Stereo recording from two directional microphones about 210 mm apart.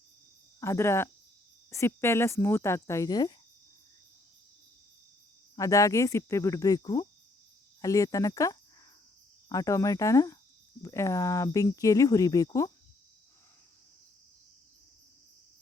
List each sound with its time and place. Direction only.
0.6 s speech: 10° left (ahead or behind)
5.5 s speech: 15° left (ahead or behind)